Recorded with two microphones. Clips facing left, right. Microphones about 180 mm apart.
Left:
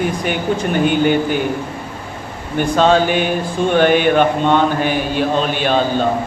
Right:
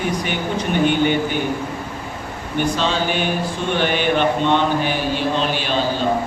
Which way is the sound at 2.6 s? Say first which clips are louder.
Left 7 dB; 50° left (ahead or behind).